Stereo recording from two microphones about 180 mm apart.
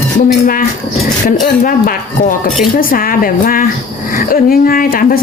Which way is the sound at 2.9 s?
50° left (ahead or behind).